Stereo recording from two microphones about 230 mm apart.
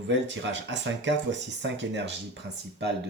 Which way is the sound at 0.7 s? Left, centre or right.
Right.